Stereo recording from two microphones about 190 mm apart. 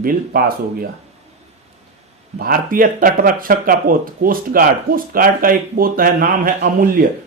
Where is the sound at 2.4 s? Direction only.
45° right (ahead or behind).